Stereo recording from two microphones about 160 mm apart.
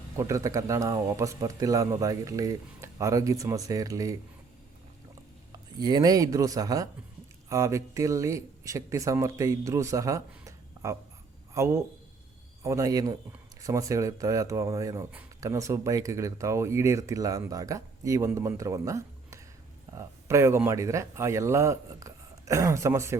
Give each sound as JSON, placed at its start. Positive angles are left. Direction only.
{"t": 0.2, "sound": "speech", "side_deg": -20}
{"t": 5.5, "sound": "speech", "side_deg": -25}